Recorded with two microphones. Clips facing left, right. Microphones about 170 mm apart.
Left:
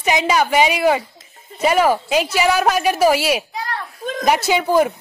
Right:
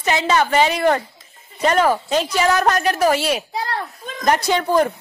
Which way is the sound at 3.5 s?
35° right (ahead or behind).